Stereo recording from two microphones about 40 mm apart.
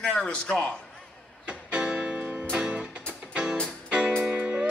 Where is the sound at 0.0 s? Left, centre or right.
Left.